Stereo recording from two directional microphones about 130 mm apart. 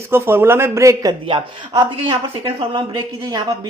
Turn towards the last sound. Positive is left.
turn(degrees=-35)  # may be behind; listen again after turning